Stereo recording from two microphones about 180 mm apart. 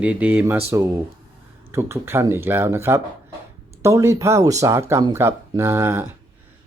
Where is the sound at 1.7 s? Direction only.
15° right (ahead or behind).